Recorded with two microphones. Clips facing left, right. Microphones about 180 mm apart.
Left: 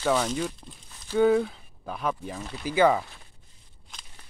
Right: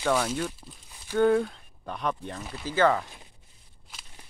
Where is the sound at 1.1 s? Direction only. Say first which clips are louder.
Left 1 dB; 5° left (ahead or behind).